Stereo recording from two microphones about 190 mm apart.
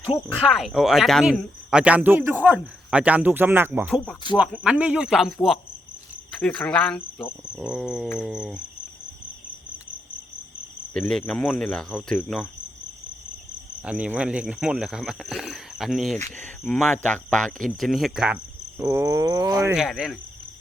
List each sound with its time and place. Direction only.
0.3 s speech: centre (ahead or behind)
10.9 s speech: 5° left (ahead or behind)
13.8 s speech: 5° right (ahead or behind)
18.8 s speech: 15° right (ahead or behind)
19.7 s speech: centre (ahead or behind)